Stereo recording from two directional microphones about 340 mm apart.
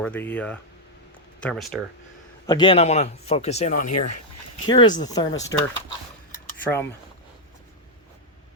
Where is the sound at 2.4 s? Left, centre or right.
Centre.